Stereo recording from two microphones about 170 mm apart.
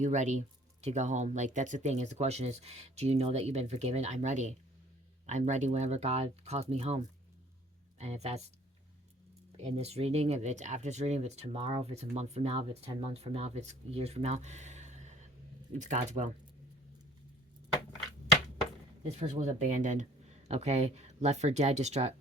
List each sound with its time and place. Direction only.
0.0 s speech: 45° right (ahead or behind)
9.5 s speech: 35° right (ahead or behind)
19.0 s speech: 45° right (ahead or behind)